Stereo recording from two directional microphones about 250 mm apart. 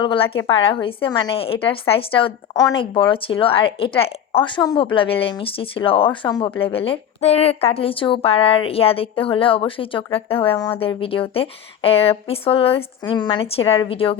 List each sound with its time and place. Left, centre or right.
0.0 s a woman's voice: left